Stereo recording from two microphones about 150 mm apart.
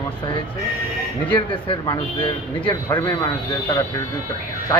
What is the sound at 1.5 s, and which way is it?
Speech, 30° left (ahead or behind).